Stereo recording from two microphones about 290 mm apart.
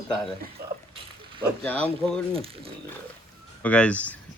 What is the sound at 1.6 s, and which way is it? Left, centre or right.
Speech, centre.